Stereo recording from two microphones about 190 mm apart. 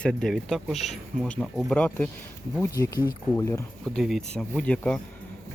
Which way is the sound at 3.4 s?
15° left (ahead or behind).